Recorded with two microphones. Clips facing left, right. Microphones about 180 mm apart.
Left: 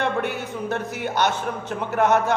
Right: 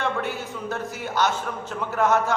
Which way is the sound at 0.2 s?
65° left (ahead or behind).